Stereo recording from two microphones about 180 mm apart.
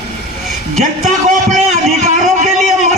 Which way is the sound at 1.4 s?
40° right (ahead or behind).